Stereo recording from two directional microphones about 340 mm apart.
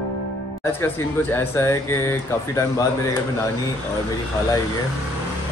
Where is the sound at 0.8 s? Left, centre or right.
Centre.